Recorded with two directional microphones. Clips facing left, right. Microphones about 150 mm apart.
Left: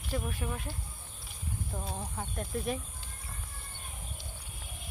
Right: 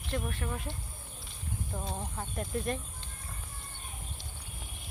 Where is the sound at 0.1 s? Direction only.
10° left (ahead or behind).